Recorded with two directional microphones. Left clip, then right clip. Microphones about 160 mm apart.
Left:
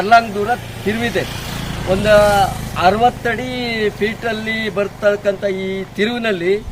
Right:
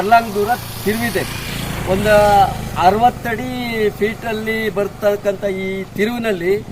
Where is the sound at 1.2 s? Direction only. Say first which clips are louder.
Right 1 dB; 40° left (ahead or behind).